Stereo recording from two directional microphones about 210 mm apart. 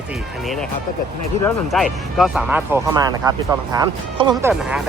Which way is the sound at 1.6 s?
Centre (ahead or behind).